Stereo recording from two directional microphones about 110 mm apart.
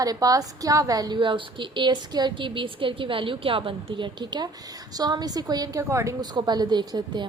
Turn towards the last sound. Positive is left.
turn(degrees=-40)  # may be behind; listen again after turning